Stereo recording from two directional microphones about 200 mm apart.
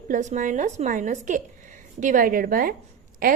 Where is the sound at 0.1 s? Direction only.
35° right (ahead or behind).